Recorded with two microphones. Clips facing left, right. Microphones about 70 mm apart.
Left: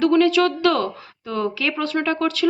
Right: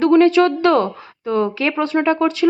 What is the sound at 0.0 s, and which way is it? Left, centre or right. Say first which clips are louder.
Speech: right 4 dB; right.